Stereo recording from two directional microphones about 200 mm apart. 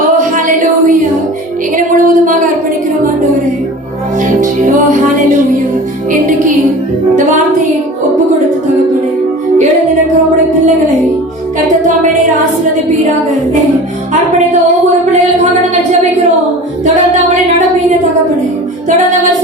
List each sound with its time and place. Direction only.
1.7 s music: 40° right (ahead or behind)
6.1 s music: 40° right (ahead or behind)